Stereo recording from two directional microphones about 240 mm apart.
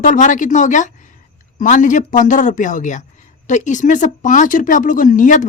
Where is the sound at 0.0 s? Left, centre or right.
Left.